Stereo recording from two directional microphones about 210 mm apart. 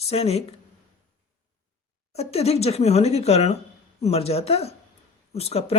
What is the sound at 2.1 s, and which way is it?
A woman's voice, 30° left (ahead or behind).